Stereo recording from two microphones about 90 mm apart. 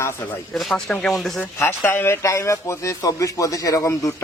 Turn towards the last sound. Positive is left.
turn(degrees=35)  # may be behind; listen again after turning